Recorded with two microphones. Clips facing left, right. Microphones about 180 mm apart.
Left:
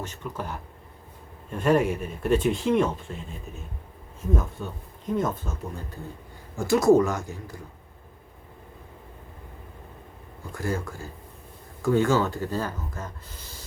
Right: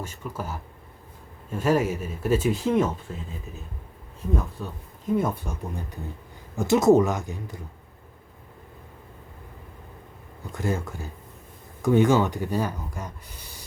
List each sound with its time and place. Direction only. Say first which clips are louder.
0.0 s speech: even; 10° right (ahead or behind)
4.3 s speech: left 1 dB; centre (ahead or behind); by 7.6 s 20° right (ahead or behind)
10.5 s speech: right 1 dB; 20° right (ahead or behind)